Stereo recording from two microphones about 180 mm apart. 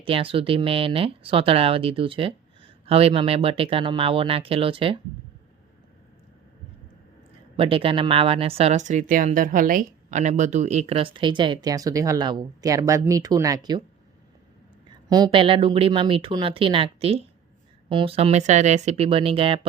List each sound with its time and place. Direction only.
0.0 s speech: 30° right (ahead or behind)
7.5 s speech: 30° right (ahead or behind)
15.1 s speech: 25° right (ahead or behind)